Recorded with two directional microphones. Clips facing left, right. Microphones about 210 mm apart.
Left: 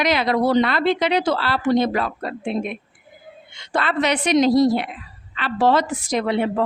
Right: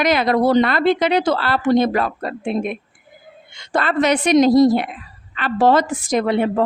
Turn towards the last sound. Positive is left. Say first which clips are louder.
# right 3 dB
turn(degrees=-50)  # may be behind; listen again after turning